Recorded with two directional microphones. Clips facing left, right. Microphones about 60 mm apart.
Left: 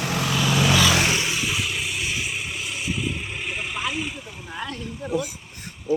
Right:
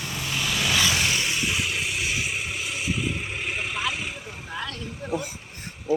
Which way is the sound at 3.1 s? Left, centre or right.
Right.